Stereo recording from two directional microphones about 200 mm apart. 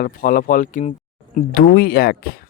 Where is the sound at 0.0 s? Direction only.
45° left (ahead or behind).